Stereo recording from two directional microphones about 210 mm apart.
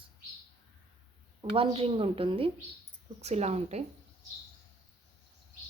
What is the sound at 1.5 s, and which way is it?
A woman's voice, 25° right (ahead or behind).